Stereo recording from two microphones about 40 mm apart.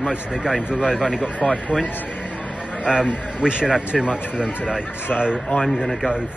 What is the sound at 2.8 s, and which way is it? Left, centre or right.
Speech, right.